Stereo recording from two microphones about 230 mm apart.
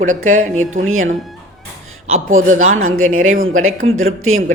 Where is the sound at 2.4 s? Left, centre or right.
Right.